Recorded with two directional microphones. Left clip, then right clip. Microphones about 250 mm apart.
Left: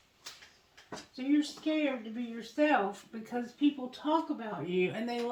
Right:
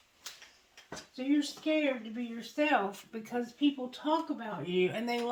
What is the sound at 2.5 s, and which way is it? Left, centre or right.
Speech, right.